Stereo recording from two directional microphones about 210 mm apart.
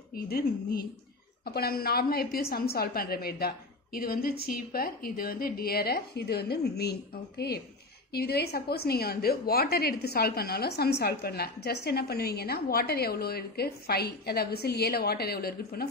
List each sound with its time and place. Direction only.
0.1 s a woman's voice: 45° left (ahead or behind)